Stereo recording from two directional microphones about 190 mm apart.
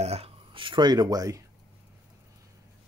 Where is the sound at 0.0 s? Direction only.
35° right (ahead or behind).